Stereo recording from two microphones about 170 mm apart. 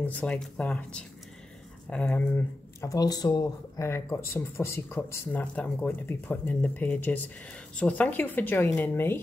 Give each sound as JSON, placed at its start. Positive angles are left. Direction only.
{"t": 0.0, "sound": "speech", "side_deg": 10}